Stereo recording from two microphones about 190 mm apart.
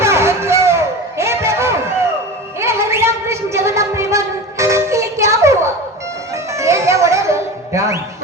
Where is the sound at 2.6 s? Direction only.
15° right (ahead or behind).